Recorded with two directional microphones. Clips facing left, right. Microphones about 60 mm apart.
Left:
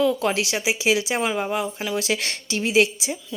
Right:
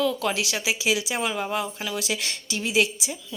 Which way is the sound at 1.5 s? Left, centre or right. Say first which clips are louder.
Left 3 dB; centre.